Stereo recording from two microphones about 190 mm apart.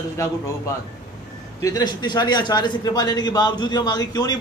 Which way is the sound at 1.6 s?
20° left (ahead or behind).